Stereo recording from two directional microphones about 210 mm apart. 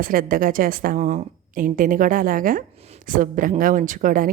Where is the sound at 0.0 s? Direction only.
40° right (ahead or behind).